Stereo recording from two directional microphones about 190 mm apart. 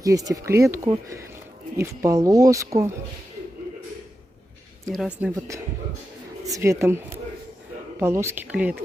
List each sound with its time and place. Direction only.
0.0 s speech: 20° right (ahead or behind)
4.9 s a woman's voice: 5° right (ahead or behind)
6.4 s speech: 15° right (ahead or behind)
8.0 s speech: 15° right (ahead or behind)